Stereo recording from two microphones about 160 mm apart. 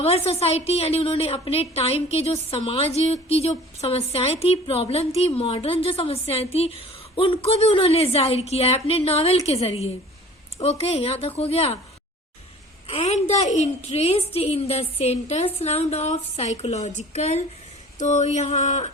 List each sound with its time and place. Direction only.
0.0 s a woman's voice: 40° left (ahead or behind)
12.9 s a woman's voice: 40° left (ahead or behind)